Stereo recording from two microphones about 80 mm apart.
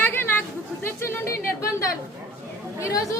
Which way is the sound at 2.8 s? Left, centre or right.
Left.